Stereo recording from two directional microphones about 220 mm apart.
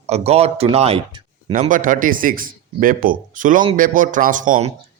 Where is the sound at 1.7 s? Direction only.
35° right (ahead or behind).